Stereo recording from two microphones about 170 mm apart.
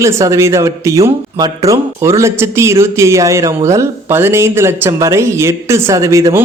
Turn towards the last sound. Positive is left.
turn(degrees=-20)  # may be behind; listen again after turning